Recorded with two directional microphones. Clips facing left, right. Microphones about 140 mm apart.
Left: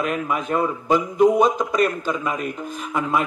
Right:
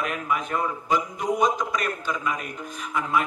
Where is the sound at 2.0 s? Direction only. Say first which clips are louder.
Left 4 dB; 40° left (ahead or behind).